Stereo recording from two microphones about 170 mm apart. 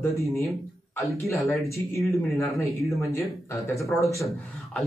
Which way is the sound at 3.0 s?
15° left (ahead or behind).